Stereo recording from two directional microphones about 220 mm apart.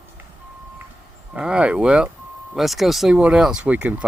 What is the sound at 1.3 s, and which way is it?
Speech, 5° right (ahead or behind).